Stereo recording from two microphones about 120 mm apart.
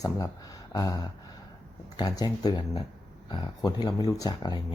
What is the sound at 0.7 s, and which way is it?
Speech, 30° left (ahead or behind).